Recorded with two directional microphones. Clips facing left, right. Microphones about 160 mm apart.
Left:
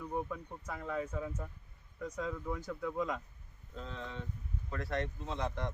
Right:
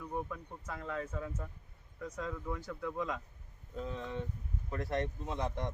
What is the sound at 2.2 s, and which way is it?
Speech, 5° left (ahead or behind).